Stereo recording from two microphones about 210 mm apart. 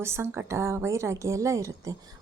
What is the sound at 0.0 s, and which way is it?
Speech, 10° right (ahead or behind).